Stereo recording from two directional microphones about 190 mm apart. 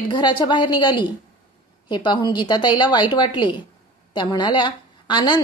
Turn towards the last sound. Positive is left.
turn(degrees=25)  # may be behind; listen again after turning